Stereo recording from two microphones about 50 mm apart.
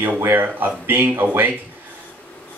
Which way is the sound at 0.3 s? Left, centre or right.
Right.